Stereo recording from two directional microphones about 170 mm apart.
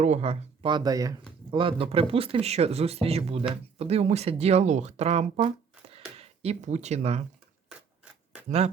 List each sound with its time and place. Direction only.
0.0 s speech: 40° right (ahead or behind)
8.4 s speech: 40° right (ahead or behind)